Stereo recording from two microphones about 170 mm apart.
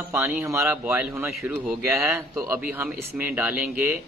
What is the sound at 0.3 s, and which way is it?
Speech, 15° right (ahead or behind).